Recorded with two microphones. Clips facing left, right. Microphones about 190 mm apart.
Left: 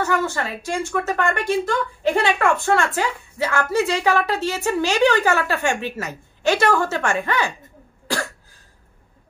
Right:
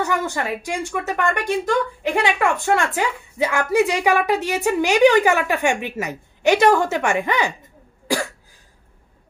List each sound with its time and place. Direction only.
0.0 s a woman's voice: 15° right (ahead or behind)